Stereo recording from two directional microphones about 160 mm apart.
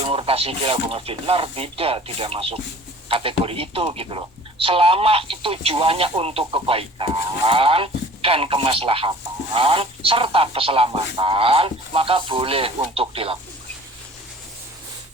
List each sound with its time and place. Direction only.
0.0 s speech: 35° right (ahead or behind)